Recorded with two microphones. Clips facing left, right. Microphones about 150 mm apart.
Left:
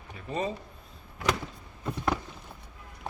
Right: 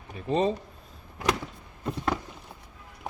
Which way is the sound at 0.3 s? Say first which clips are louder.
Right 7 dB; 30° right (ahead or behind).